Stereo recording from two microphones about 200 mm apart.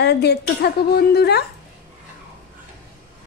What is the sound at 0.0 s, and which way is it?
A woman's voice, 55° left (ahead or behind).